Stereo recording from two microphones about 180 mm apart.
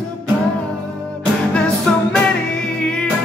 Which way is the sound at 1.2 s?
5° left (ahead or behind).